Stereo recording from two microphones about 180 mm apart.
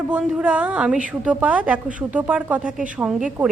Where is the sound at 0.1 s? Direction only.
5° right (ahead or behind).